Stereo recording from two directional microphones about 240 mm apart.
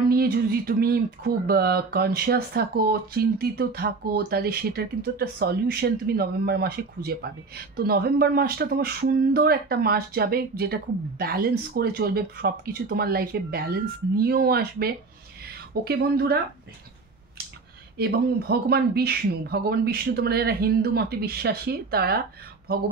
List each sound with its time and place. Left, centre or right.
0.1 s speech: right
17.9 s speech: right